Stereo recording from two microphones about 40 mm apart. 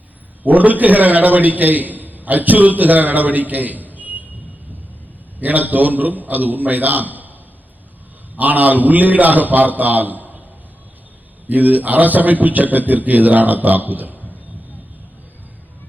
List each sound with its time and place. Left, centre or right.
0.4 s a man's voice: right
3.9 s vehicle: right
5.4 s a man's voice: right
8.4 s a man's voice: right
11.4 s a man's voice: right